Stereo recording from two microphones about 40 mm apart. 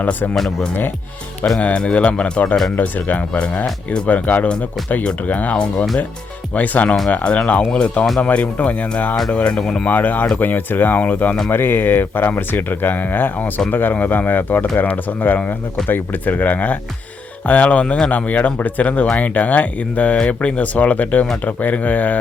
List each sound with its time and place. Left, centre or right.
0.0 s speech: left
1.6 s speech: left
2.7 s speech: left
9.6 s speech: centre
9.8 s speech: left
11.5 s speech: left
13.9 s speech: left